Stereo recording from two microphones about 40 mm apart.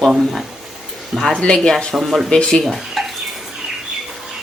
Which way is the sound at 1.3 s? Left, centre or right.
Left.